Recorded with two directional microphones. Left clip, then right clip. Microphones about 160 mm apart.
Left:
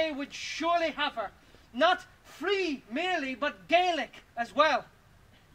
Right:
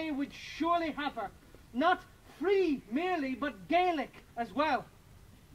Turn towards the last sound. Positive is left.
turn(degrees=15)  # may be behind; listen again after turning